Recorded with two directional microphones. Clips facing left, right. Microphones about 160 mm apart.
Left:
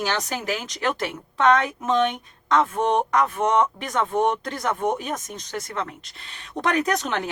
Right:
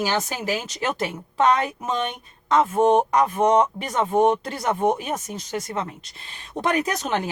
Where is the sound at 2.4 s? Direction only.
10° right (ahead or behind).